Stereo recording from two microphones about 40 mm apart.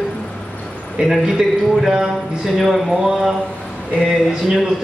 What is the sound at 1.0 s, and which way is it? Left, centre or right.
Speech, right.